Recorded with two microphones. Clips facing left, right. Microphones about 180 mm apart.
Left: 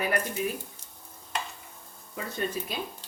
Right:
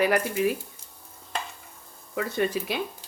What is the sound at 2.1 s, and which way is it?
Speech, 75° right (ahead or behind).